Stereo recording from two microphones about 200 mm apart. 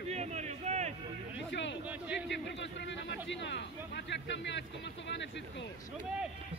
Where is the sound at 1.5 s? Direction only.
65° left (ahead or behind).